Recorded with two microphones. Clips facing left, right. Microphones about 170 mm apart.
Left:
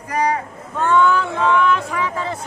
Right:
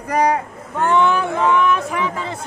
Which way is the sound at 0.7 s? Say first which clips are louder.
Even; 15° right (ahead or behind).